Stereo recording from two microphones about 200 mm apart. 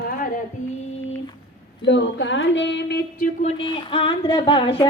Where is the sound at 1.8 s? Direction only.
65° left (ahead or behind).